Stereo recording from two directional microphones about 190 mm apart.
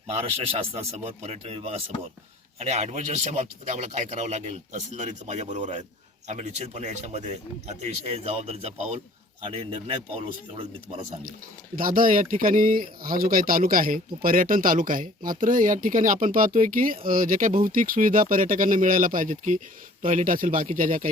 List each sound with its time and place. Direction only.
0.2 s speech: 30° right (ahead or behind)
11.8 s speech: 45° right (ahead or behind)